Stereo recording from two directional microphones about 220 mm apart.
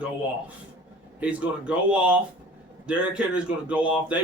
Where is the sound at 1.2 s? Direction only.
5° right (ahead or behind).